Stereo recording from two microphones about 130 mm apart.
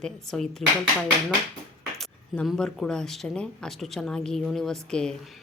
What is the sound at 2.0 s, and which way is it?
A woman's voice, centre (ahead or behind).